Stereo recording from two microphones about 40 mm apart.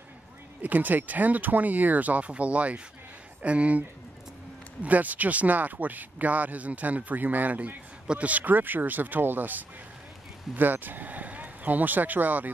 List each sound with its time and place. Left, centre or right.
0.6 s speech: right
4.8 s speech: right